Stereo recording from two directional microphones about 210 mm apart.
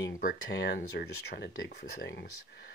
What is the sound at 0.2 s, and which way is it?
Speech, 50° left (ahead or behind).